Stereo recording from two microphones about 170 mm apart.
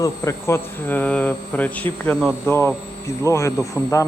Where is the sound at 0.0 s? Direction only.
15° left (ahead or behind).